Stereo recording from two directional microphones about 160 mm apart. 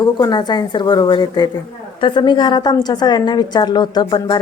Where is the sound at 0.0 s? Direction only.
25° left (ahead or behind).